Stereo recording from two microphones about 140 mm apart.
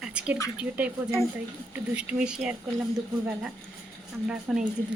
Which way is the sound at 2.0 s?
5° right (ahead or behind).